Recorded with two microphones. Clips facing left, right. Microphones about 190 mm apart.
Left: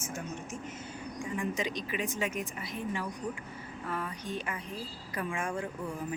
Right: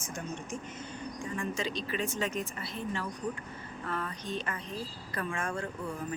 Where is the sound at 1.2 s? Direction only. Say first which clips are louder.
Left 2 dB; 15° left (ahead or behind).